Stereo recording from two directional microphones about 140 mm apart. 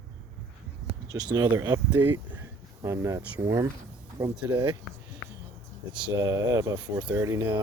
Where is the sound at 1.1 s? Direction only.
30° right (ahead or behind).